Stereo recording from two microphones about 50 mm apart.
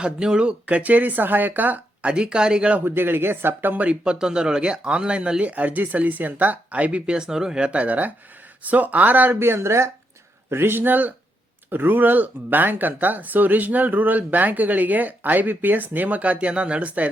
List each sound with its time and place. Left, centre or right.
0.0 s speech: centre
2.1 s speech: centre
2.8 s speech: right
3.8 s speech: centre
7.7 s speech: right
9.4 s speech: right
10.5 s speech: right